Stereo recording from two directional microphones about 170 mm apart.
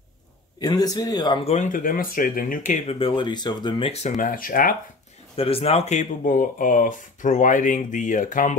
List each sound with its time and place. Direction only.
0.6 s speech: 25° left (ahead or behind)
1.5 s speech: 50° left (ahead or behind); by 3.9 s 25° left (ahead or behind)
4.2 s speech: 55° left (ahead or behind)
5.3 s speech: 35° left (ahead or behind); by 8.5 s 50° left (ahead or behind)